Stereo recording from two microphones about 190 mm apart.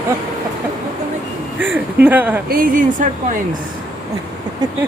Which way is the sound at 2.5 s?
50° right (ahead or behind).